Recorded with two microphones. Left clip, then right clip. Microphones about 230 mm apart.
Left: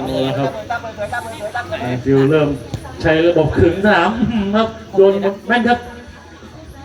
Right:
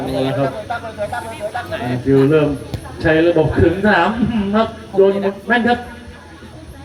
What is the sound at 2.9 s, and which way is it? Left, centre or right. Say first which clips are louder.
A woman's voice: even; left.